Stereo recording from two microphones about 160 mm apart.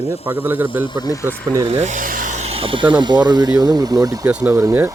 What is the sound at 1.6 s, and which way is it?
Speech, 45° right (ahead or behind).